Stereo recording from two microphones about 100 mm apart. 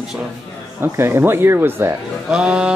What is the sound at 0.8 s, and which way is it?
Speech, 25° right (ahead or behind).